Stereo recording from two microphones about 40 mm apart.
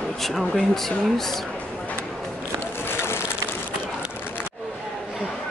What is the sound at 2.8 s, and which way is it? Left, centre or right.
Bicycle, left.